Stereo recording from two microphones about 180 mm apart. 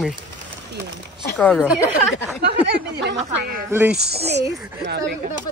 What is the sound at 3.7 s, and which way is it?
Speech, 15° right (ahead or behind).